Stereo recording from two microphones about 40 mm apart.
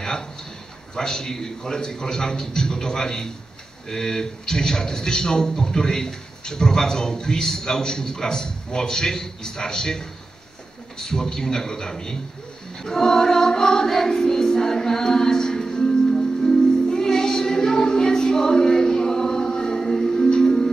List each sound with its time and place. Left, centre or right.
0.0 s a sound: centre
0.9 s a man's voice: centre
12.7 s music: centre